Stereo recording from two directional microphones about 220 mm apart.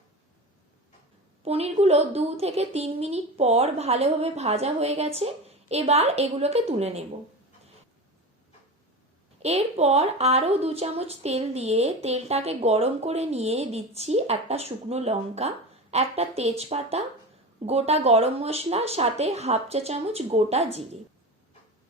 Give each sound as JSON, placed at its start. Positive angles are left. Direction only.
{"t": 1.4, "sound": "a woman's voice", "side_deg": -25}
{"t": 9.4, "sound": "a woman's voice", "side_deg": -30}